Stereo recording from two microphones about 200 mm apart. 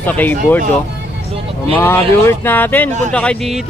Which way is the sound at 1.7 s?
10° left (ahead or behind).